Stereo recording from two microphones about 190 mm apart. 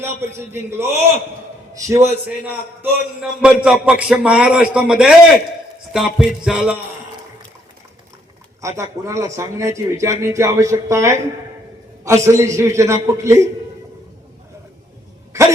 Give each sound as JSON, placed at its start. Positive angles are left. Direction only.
{"t": 0.3, "sound": "a man's voice", "side_deg": -15}
{"t": 8.6, "sound": "a man's voice", "side_deg": -15}